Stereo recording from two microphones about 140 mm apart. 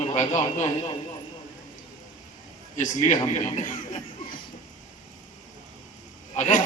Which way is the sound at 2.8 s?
60° left (ahead or behind).